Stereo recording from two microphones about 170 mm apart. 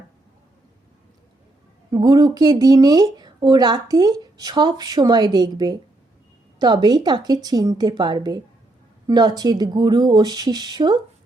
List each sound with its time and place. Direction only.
1.9 s speech: 25° right (ahead or behind)